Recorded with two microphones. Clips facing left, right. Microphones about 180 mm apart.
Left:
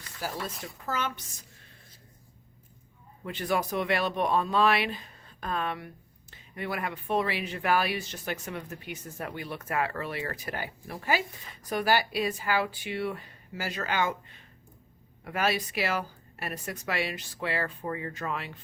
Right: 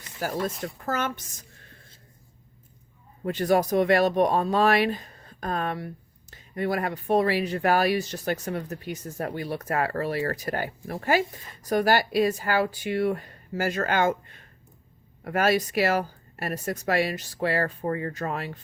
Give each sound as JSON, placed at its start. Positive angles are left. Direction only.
{"t": 0.2, "sound": "speech", "side_deg": -50}
{"t": 3.2, "sound": "speech", "side_deg": -40}